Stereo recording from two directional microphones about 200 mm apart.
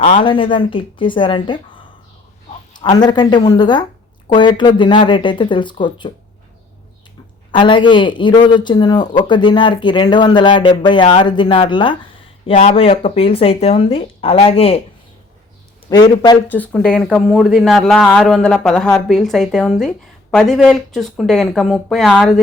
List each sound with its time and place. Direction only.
0.0 s speech: 30° left (ahead or behind)
7.5 s speech: 25° left (ahead or behind)
15.9 s speech: 20° left (ahead or behind)
16.5 s a man's voice: 5° left (ahead or behind)